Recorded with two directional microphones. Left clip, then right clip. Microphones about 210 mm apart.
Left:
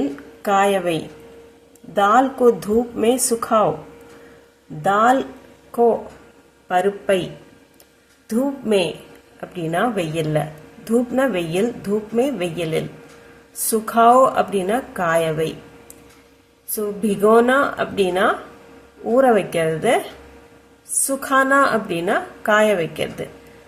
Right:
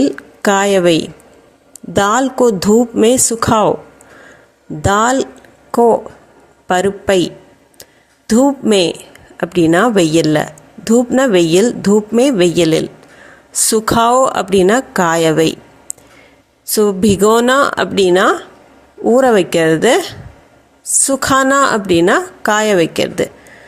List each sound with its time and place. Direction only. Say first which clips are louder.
0.0 s a woman's voice: right 10 dB; 45° right (ahead or behind)
4.8 s a woman's voice: right 3 dB; 45° right (ahead or behind)
6.7 s a woman's voice: right 5 dB; 45° right (ahead or behind)
8.3 s a woman's voice: right 8 dB; 45° right (ahead or behind)
16.7 s a woman's voice: right 11 dB; 45° right (ahead or behind)
21.1 s a woman's voice: right 4 dB; 45° right (ahead or behind)